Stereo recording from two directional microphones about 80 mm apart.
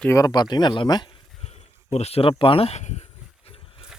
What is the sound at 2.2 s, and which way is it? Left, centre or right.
Speech, left.